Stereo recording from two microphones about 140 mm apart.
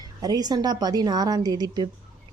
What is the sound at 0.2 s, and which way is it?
A woman's voice, 30° right (ahead or behind).